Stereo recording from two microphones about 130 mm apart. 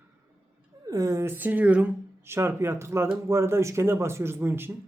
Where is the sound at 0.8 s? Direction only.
25° right (ahead or behind).